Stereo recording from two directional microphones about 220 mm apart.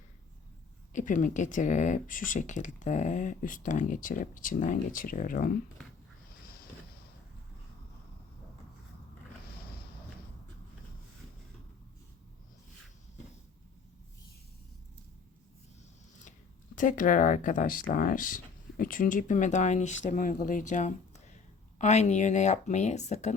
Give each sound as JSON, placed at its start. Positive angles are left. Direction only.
{"t": 0.9, "sound": "speech", "side_deg": 35}
{"t": 16.7, "sound": "speech", "side_deg": 35}